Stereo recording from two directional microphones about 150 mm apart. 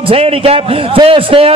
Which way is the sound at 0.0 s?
40° right (ahead or behind).